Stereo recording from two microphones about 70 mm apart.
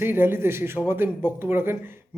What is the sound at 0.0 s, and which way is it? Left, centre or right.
A man's voice, right.